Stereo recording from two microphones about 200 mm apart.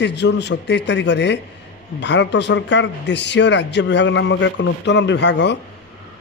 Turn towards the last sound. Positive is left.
turn(degrees=60)  # may be behind; listen again after turning